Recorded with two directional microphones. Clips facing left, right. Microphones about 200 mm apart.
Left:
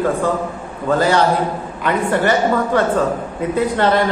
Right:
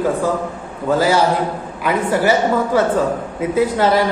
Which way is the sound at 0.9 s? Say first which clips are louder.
Even; 5° right (ahead or behind).